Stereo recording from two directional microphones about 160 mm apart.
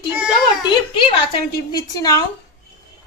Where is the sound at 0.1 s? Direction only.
10° right (ahead or behind).